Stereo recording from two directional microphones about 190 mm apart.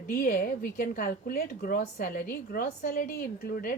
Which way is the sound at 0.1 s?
50° left (ahead or behind).